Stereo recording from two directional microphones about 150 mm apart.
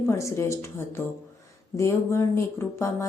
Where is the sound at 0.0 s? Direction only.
20° left (ahead or behind).